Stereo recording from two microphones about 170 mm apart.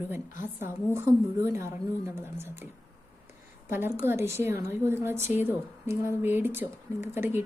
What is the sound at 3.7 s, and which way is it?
A woman's voice, 15° right (ahead or behind).